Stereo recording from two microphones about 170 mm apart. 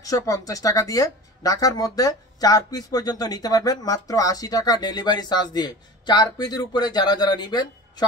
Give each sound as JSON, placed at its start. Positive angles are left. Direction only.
{"t": 0.0, "sound": "speech", "side_deg": 20}